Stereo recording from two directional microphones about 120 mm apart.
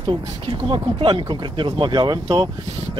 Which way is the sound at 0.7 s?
40° right (ahead or behind).